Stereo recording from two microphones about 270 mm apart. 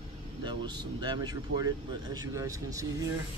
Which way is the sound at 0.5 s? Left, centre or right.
Centre.